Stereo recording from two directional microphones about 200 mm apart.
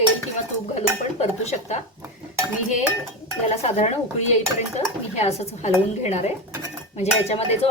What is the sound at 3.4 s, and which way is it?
Dishes, 35° left (ahead or behind).